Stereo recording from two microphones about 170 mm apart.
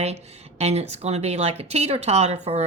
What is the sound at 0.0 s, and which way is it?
Speech, 40° right (ahead or behind).